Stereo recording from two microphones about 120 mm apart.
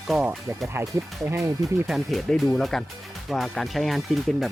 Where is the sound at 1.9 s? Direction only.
Centre (ahead or behind).